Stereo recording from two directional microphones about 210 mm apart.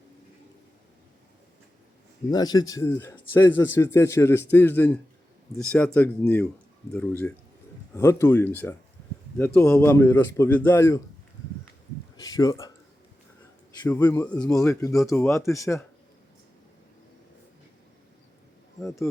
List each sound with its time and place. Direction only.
2.3 s speech: 20° left (ahead or behind)
12.1 s a sound: 15° left (ahead or behind)
13.8 s speech: 10° left (ahead or behind)